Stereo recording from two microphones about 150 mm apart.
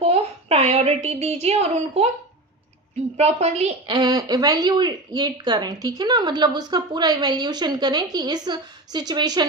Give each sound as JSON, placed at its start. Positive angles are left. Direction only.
{"t": 0.0, "sound": "speech", "side_deg": -45}
{"t": 3.2, "sound": "a woman's voice", "side_deg": -45}
{"t": 3.8, "sound": "speech", "side_deg": -30}